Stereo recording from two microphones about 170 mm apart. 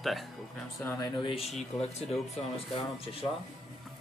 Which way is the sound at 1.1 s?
30° left (ahead or behind).